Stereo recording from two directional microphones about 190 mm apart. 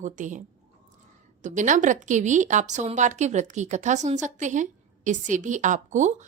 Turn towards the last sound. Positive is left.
turn(degrees=-40)  # may be behind; listen again after turning